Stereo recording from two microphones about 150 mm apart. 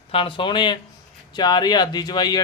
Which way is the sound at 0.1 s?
35° left (ahead or behind).